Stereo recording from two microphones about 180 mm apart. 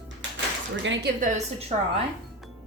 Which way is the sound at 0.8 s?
90° right.